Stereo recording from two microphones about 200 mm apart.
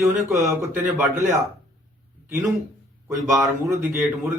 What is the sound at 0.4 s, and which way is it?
Speech, 10° right (ahead or behind).